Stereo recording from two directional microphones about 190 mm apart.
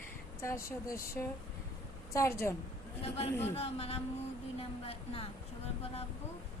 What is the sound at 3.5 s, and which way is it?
Speech, 30° left (ahead or behind).